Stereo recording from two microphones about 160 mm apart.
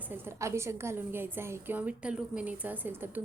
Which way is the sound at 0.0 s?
15° right (ahead or behind).